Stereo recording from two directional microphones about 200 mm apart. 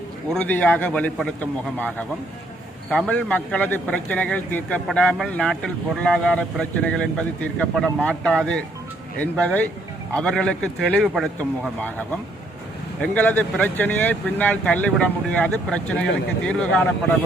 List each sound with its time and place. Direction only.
0.3 s a man's voice: 10° left (ahead or behind)